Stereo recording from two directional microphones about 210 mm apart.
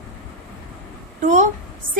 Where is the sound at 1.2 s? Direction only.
35° right (ahead or behind).